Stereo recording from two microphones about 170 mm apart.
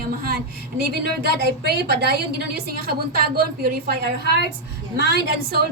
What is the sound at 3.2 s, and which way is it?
Speech, 65° right (ahead or behind).